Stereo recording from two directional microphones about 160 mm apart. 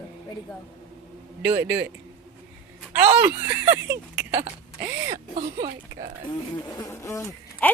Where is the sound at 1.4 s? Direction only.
10° right (ahead or behind).